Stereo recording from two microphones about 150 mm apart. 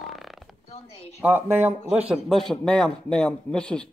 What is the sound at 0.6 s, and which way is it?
Speech, 45° left (ahead or behind).